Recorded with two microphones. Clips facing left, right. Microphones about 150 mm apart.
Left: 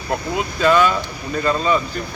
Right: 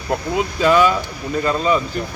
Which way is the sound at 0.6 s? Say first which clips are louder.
Right 1 dB; 5° right (ahead or behind).